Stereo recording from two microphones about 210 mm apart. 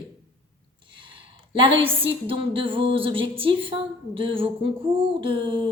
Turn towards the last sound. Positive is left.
turn(degrees=-25)  # may be behind; listen again after turning